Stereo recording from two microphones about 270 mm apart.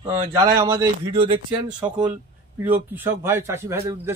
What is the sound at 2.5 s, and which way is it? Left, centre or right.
Speech, centre.